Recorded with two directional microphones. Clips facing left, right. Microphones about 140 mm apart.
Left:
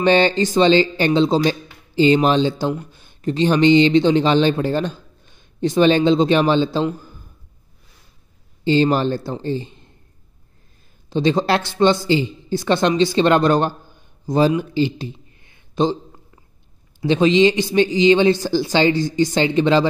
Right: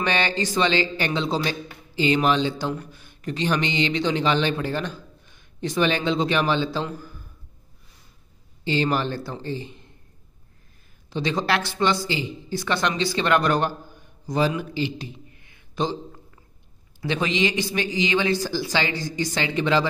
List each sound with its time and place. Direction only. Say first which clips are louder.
0.0 s speech: left 9 dB; 30° left (ahead or behind)
8.6 s speech: left 7 dB; 30° left (ahead or behind)
11.1 s a woman's voice: left 7 dB; 30° left (ahead or behind)
17.0 s speech: left 10 dB; 25° left (ahead or behind)